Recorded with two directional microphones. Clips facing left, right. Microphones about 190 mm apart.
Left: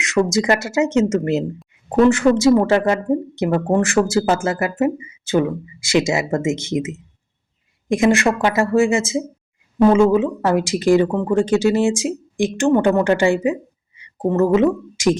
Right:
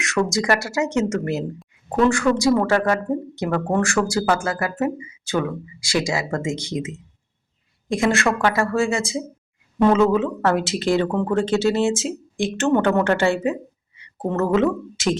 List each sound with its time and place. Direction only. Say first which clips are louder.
0.3 s speech: left 3 dB; 20° left (ahead or behind)
9.7 s speech: left 3 dB; 10° left (ahead or behind)